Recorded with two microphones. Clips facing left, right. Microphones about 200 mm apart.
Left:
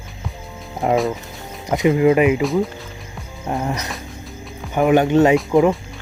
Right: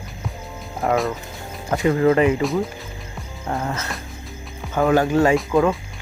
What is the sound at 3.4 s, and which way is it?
Speech, 15° left (ahead or behind).